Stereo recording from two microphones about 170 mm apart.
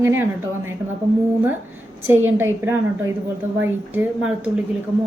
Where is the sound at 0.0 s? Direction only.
15° right (ahead or behind).